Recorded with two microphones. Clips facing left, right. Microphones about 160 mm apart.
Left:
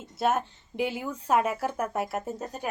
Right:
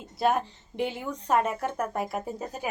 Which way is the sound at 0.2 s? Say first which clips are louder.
Right 1 dB; centre (ahead or behind).